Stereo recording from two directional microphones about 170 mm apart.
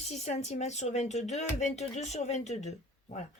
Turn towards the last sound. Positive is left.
turn(degrees=40)  # may be behind; listen again after turning